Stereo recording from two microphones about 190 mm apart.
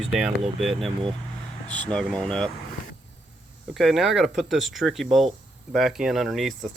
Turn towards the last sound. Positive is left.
turn(degrees=0)  # may be behind; listen again after turning